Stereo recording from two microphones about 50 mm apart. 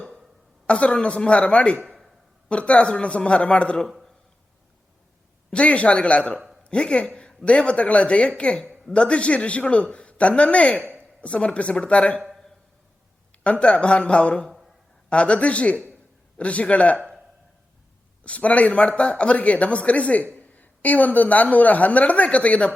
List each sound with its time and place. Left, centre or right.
0.7 s speech: left
5.5 s speech: left
13.4 s speech: left
18.2 s a woman's voice: left